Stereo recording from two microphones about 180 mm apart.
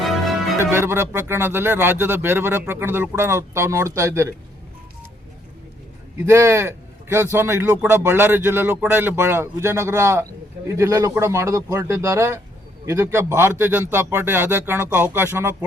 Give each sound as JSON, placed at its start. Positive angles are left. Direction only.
{"t": 0.0, "sound": "music", "side_deg": 0}
{"t": 0.6, "sound": "speech", "side_deg": -15}
{"t": 6.2, "sound": "speech", "side_deg": -15}